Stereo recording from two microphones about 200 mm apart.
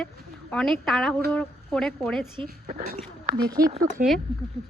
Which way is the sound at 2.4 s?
45° right (ahead or behind).